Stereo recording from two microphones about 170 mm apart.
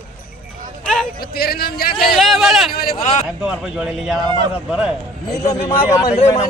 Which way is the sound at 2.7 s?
65° left (ahead or behind).